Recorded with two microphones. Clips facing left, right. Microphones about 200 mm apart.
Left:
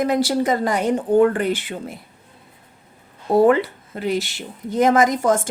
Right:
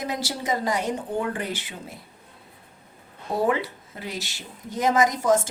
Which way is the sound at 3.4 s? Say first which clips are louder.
Left 8 dB; 60° left (ahead or behind).